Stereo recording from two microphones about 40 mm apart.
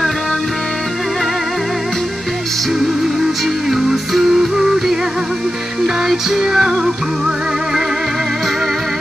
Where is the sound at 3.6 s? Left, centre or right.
Centre.